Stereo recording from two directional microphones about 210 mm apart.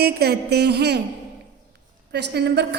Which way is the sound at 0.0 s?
50° right (ahead or behind).